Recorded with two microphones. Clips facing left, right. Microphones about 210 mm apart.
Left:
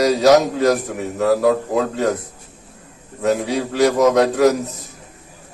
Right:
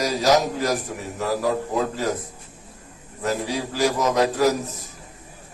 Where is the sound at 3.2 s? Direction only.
65° left (ahead or behind).